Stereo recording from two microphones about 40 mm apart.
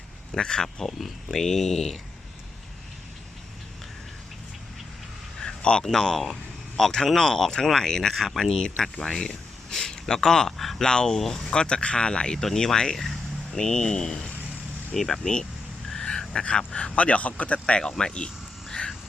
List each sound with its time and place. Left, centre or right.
0.3 s speech: centre
0.9 s speech: centre
5.4 s a sound: centre
5.8 s speech: centre
8.1 s speech: centre
8.5 s speech: centre
10.6 s a sound: centre
10.8 s speech: centre
11.5 s speech: left
12.4 s speech: centre
15.9 s a sound: centre
16.6 s speech: left
17.7 s speech: left
18.7 s frog: centre